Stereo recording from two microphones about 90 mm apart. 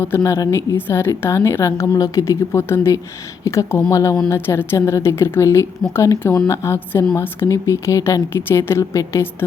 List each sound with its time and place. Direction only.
0.2 s a woman's voice: 35° left (ahead or behind)